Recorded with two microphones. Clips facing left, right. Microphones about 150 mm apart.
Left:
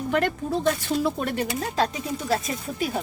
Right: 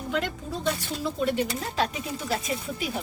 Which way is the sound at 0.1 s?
55° left (ahead or behind).